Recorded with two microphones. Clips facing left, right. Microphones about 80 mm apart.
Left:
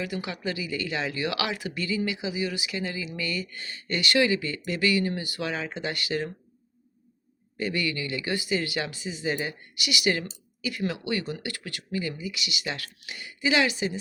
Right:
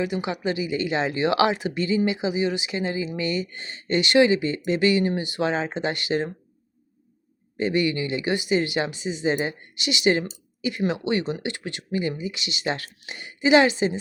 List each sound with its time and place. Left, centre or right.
0.0 s speech: right
7.6 s speech: right